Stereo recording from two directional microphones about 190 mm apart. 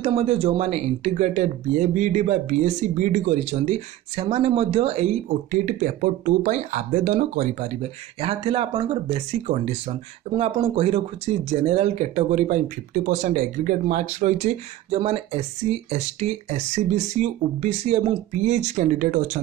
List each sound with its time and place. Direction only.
0.0 s speech: 30° right (ahead or behind)
8.2 s speech: 30° right (ahead or behind); by 19.4 s 45° right (ahead or behind)